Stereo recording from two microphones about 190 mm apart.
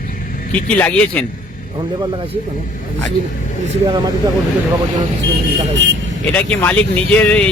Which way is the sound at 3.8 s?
20° right (ahead or behind).